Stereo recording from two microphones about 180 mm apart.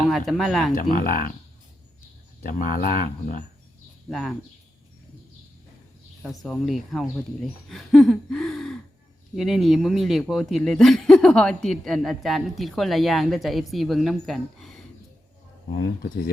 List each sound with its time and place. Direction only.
0.1 s speech: centre (ahead or behind)
0.8 s speech: 50° left (ahead or behind)
2.4 s speech: 45° left (ahead or behind)
4.1 s speech: centre (ahead or behind)
6.4 s speech: centre (ahead or behind)
15.8 s speech: 60° left (ahead or behind)